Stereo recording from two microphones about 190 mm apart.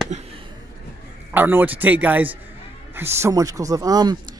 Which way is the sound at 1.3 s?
10° right (ahead or behind).